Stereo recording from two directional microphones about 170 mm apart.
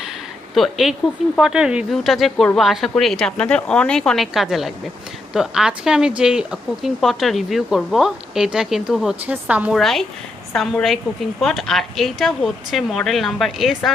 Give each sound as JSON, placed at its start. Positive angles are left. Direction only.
{"t": 0.5, "sound": "a woman's voice", "side_deg": 0}